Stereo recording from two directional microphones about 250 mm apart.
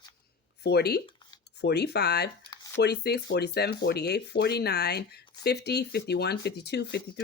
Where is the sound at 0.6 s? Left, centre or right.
Left.